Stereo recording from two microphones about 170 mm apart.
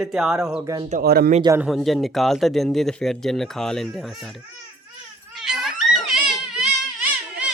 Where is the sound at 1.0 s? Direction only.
65° right (ahead or behind).